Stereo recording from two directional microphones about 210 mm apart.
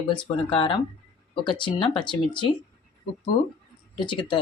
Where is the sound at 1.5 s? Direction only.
25° left (ahead or behind).